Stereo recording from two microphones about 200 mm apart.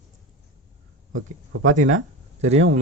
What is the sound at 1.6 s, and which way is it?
Speech, 40° right (ahead or behind).